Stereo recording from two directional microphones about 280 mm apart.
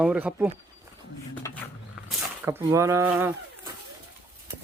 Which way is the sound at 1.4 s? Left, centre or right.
Centre.